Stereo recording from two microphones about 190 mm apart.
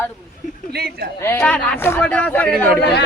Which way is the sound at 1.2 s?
10° left (ahead or behind).